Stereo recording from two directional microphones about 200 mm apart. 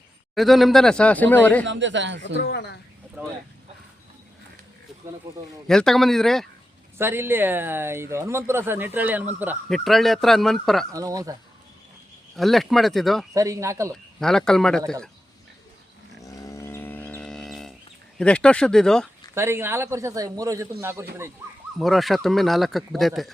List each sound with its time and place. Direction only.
0.3 s speech: centre (ahead or behind)
1.6 s speech: 65° right (ahead or behind)
2.4 s speech: 55° left (ahead or behind)
5.6 s speech: centre (ahead or behind)
7.0 s speech: 10° right (ahead or behind)
10.9 s speech: 15° right (ahead or behind)
12.4 s speech: centre (ahead or behind)
13.3 s speech: 15° right (ahead or behind)
13.9 s speech: 5° left (ahead or behind)
16.2 s livestock: 15° left (ahead or behind)
18.2 s speech: 5° left (ahead or behind)
19.3 s speech: 10° right (ahead or behind)
21.8 s speech: centre (ahead or behind)